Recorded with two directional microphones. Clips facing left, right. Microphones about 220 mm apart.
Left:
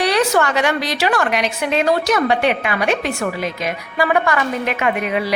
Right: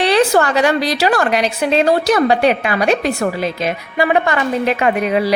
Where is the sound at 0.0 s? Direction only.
30° right (ahead or behind).